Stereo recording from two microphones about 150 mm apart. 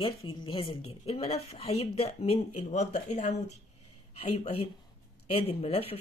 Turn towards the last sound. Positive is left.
turn(degrees=40)  # may be behind; listen again after turning